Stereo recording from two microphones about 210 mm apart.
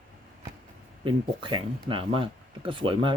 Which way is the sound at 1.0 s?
25° right (ahead or behind).